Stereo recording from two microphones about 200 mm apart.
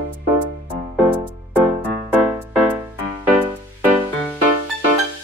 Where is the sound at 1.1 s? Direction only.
10° right (ahead or behind).